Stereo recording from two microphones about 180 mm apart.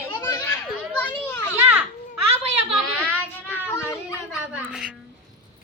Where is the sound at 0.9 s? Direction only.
10° left (ahead or behind).